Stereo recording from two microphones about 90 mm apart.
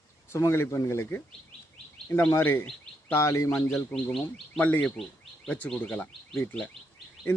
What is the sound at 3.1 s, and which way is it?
Speech, 30° left (ahead or behind).